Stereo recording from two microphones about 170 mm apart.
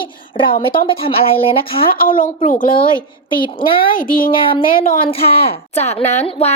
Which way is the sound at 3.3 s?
30° left (ahead or behind).